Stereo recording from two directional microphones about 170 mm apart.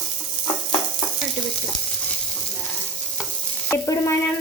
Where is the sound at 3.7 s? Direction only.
15° left (ahead or behind).